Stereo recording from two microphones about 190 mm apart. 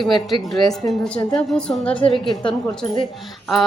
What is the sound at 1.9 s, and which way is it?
Speech, 25° left (ahead or behind).